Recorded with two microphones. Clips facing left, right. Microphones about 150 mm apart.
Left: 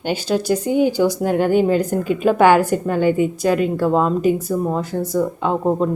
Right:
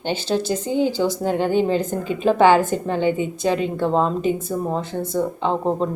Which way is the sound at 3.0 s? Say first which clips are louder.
Left 4 dB; 25° right (ahead or behind).